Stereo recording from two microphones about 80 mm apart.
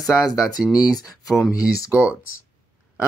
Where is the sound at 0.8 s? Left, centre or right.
Left.